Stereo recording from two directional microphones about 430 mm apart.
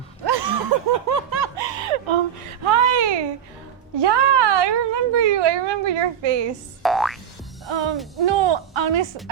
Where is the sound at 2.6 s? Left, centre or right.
Right.